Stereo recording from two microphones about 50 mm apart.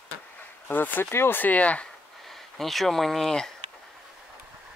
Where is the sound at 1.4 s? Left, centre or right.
Left.